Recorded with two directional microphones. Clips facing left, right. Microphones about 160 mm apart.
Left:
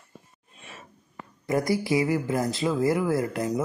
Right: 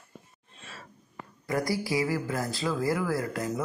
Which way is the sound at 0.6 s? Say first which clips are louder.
Left 1 dB; 20° left (ahead or behind).